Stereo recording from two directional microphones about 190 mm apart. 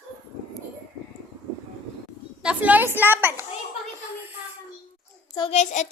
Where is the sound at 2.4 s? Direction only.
10° right (ahead or behind).